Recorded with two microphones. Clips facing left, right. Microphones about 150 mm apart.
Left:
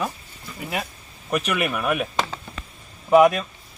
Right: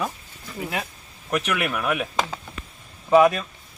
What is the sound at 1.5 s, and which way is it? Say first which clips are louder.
Speech: left 1 dB; centre (ahead or behind).